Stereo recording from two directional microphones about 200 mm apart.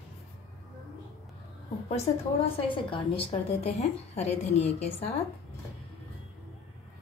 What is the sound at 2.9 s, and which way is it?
A woman's voice, 25° left (ahead or behind).